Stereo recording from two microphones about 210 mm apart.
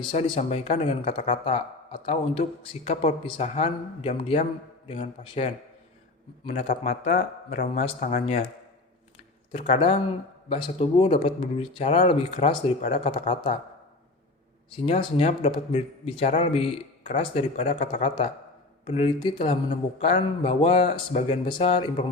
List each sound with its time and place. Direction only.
0.0 s speech: 25° left (ahead or behind)
9.5 s speech: 30° left (ahead or behind)
14.8 s speech: 30° left (ahead or behind)